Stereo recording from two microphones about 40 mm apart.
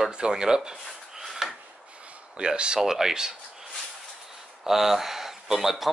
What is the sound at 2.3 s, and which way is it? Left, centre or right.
Speech, right.